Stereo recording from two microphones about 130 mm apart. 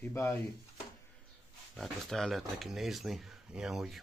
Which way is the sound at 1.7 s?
5° left (ahead or behind).